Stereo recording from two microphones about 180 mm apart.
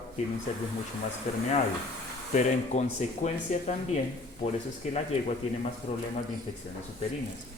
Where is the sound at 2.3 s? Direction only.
40° left (ahead or behind).